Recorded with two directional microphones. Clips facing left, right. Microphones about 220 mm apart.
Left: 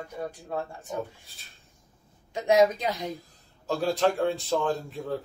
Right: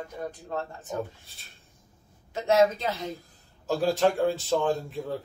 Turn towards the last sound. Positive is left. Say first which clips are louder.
# right 1 dB
turn(degrees=0)  # may be behind; listen again after turning